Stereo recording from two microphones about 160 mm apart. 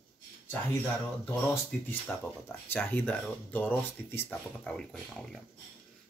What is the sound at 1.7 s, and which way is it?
Speech, 5° left (ahead or behind).